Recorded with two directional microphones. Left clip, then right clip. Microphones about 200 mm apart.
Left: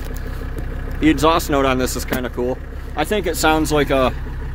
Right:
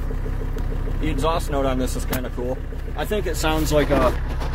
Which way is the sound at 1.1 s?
55° left (ahead or behind).